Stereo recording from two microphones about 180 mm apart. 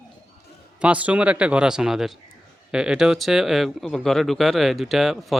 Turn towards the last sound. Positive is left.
turn(degrees=0)  # may be behind; listen again after turning